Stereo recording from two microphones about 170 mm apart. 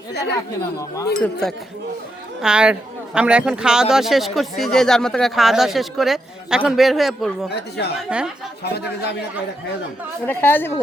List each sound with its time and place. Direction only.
0.1 s speech: 75° left (ahead or behind)
1.1 s speech: 5° left (ahead or behind)
8.6 s speech: 70° left (ahead or behind)
10.2 s a woman's voice: 10° left (ahead or behind)